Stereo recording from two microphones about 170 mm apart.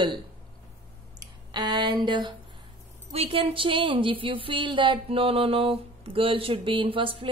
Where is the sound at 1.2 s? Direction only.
25° right (ahead or behind).